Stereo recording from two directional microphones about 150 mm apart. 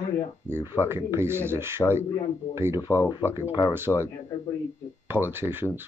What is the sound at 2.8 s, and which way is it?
Speech, 20° left (ahead or behind).